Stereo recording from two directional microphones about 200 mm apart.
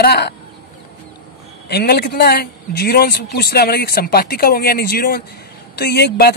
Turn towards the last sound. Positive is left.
turn(degrees=55)  # may be behind; listen again after turning